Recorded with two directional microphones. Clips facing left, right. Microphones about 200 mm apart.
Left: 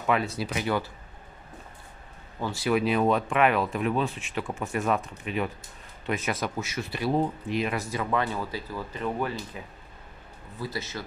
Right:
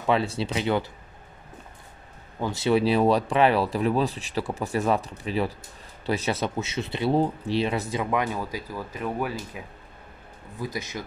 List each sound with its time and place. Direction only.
0.0 s speech: 30° right (ahead or behind)
2.4 s speech: 25° right (ahead or behind)
7.9 s speech: 15° right (ahead or behind)
10.6 s speech: 15° right (ahead or behind)